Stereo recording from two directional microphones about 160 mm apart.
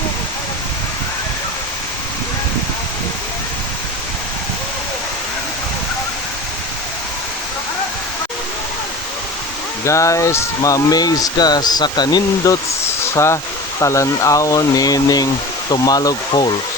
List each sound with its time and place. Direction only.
9.8 s speech: 20° left (ahead or behind)